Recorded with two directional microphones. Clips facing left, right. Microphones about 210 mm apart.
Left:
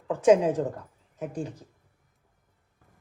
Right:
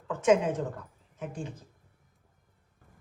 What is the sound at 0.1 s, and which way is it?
A woman's voice, 30° left (ahead or behind).